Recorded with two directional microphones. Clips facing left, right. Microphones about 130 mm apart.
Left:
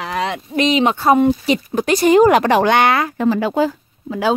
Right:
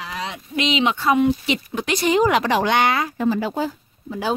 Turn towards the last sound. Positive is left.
turn(degrees=90)